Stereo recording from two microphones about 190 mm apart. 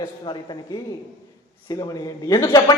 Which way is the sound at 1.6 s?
20° left (ahead or behind).